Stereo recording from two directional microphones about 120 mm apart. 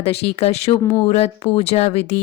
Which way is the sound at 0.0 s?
60° left (ahead or behind).